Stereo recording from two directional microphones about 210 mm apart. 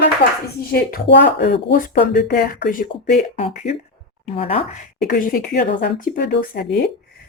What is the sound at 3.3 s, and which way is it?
Speech, 30° left (ahead or behind).